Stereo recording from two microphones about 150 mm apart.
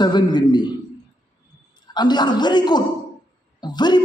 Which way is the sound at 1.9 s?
30° left (ahead or behind).